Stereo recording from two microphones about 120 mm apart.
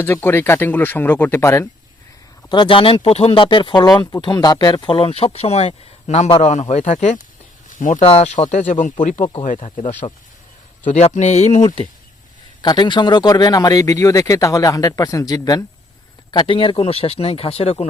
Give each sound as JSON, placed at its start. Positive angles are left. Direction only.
{"t": 0.0, "sound": "speech", "side_deg": 20}
{"t": 2.5, "sound": "speech", "side_deg": 45}
{"t": 6.4, "sound": "speech", "side_deg": 80}
{"t": 7.7, "sound": "speech", "side_deg": 90}
{"t": 8.0, "sound": "speech", "side_deg": 50}
{"t": 8.3, "sound": "speech", "side_deg": 70}
{"t": 10.9, "sound": "speech", "side_deg": 75}
{"t": 12.6, "sound": "speech", "side_deg": 40}
{"t": 16.3, "sound": "speech", "side_deg": 45}